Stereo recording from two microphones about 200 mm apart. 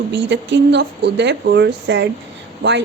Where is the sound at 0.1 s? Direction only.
60° right (ahead or behind).